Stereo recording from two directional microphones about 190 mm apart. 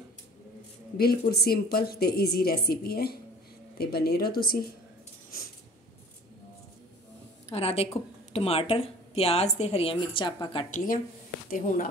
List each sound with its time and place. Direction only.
0.9 s a woman's voice: 55° left (ahead or behind)
7.4 s a woman's voice: 35° left (ahead or behind)
10.7 s speech: 45° left (ahead or behind)